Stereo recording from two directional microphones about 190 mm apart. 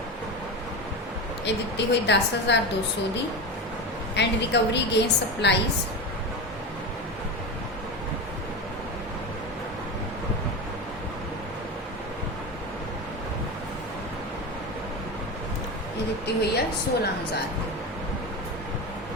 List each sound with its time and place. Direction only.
1.5 s a woman's voice: 65° left (ahead or behind)
4.1 s a woman's voice: 65° left (ahead or behind)
16.2 s a woman's voice: 60° left (ahead or behind)